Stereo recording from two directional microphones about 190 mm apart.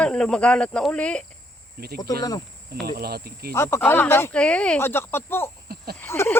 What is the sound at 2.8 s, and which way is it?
Cricket, 55° right (ahead or behind).